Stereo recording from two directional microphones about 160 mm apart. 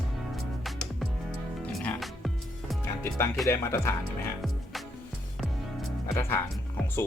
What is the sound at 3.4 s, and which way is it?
Speech, 15° left (ahead or behind).